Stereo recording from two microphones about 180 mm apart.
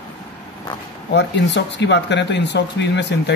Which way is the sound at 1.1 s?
75° left (ahead or behind).